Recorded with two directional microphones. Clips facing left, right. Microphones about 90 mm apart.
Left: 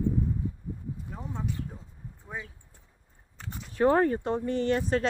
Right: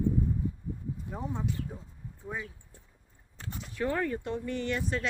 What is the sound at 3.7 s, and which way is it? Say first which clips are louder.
Speech: left 8 dB; 40° left (ahead or behind).